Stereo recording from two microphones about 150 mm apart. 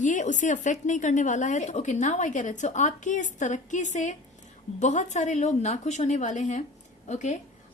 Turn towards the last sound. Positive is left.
turn(degrees=50)  # may be behind; listen again after turning